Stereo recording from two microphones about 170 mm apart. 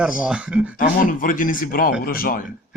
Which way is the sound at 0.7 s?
55° left (ahead or behind).